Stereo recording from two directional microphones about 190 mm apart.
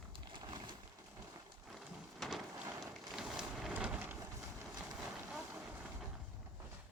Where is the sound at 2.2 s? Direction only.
Centre (ahead or behind).